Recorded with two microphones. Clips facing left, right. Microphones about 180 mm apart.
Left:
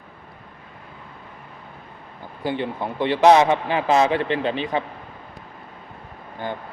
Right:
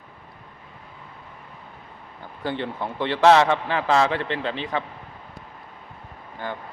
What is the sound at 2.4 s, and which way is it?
A man's voice, 15° left (ahead or behind).